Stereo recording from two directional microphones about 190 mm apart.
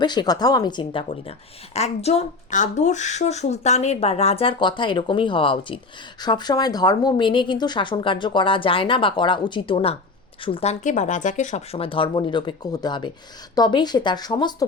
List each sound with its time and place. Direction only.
0.0 s speech: 20° left (ahead or behind)